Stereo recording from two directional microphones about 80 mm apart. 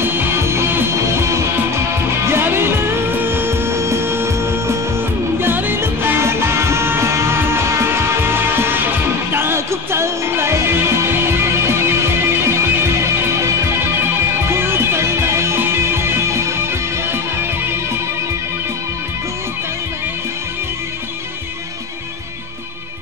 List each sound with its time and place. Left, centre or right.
0.0 s music: right
14.5 s music: right